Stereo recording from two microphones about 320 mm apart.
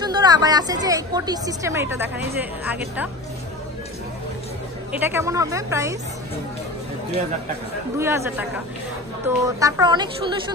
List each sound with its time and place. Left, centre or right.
0.0 s a woman's voice: centre
4.9 s a woman's voice: centre
8.0 s a woman's voice: centre